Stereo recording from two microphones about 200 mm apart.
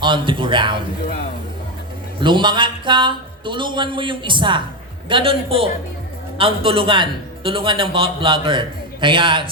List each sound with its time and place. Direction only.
0.0 s a man's voice: 25° right (ahead or behind)
2.2 s a man's voice: 25° right (ahead or behind)